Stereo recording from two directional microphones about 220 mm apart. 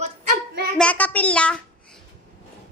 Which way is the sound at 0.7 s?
5° left (ahead or behind).